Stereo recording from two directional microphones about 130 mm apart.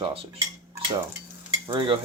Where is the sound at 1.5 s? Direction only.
40° right (ahead or behind).